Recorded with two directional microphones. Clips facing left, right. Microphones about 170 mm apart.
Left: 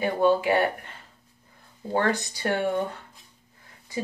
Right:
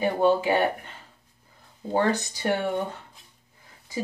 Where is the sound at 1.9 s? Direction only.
15° right (ahead or behind).